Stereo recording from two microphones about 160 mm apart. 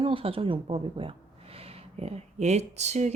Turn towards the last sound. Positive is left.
turn(degrees=-45)  # may be behind; listen again after turning